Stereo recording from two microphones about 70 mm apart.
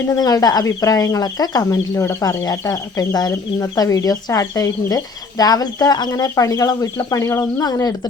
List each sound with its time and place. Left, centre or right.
0.1 s speech: left
0.6 s speech: left
1.7 s speech: left
6.1 s speech: left
7.2 s speech: left
7.6 s speech: left